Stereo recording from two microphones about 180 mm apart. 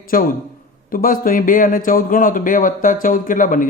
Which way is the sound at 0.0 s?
50° left (ahead or behind).